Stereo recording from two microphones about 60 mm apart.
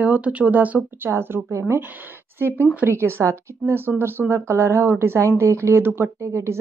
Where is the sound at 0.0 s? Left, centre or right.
Right.